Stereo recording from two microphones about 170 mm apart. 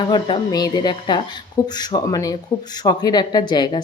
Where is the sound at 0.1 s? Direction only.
30° left (ahead or behind).